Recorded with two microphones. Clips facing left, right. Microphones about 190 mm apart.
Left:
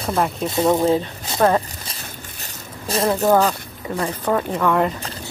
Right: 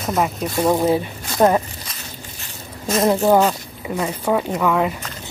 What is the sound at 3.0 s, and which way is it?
Speech, 25° right (ahead or behind).